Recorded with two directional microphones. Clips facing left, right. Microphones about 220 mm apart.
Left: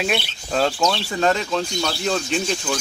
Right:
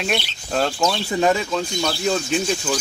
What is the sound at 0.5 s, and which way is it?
Speech, 5° right (ahead or behind).